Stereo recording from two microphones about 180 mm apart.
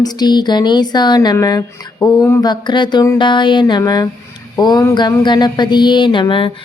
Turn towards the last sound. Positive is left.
turn(degrees=30)  # may be behind; listen again after turning